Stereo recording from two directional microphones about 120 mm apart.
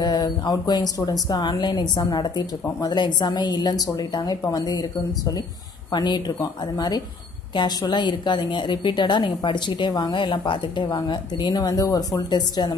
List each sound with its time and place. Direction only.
0.0 s a woman's voice: 35° left (ahead or behind)